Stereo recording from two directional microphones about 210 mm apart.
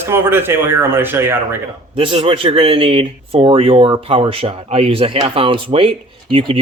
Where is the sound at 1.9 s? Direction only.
25° right (ahead or behind).